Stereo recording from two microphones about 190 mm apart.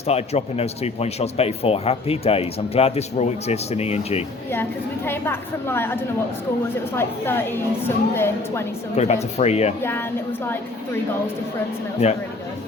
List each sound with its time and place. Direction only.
0.1 s speech: 35° left (ahead or behind)
5.0 s a woman's voice: 10° left (ahead or behind)
9.0 s speech: 35° left (ahead or behind)